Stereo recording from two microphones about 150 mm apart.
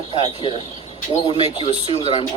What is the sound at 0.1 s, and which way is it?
Speech, 35° left (ahead or behind).